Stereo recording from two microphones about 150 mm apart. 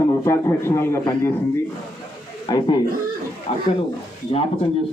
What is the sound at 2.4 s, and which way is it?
Speech, 25° left (ahead or behind).